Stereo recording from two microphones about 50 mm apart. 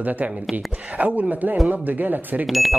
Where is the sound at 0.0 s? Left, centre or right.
Right.